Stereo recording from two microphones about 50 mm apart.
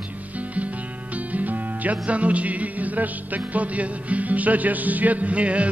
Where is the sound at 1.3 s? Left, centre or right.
Right.